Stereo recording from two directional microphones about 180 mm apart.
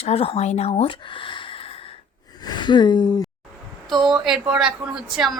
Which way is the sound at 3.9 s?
Centre (ahead or behind).